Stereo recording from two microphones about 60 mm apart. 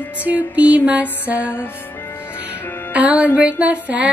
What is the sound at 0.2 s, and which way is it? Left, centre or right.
Music, right.